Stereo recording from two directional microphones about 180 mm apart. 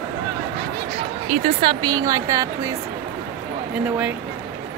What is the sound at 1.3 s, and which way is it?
A woman's voice, 35° right (ahead or behind).